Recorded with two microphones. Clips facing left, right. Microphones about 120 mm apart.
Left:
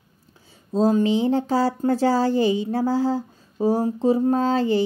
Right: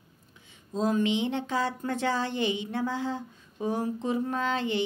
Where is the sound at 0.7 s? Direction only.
35° left (ahead or behind).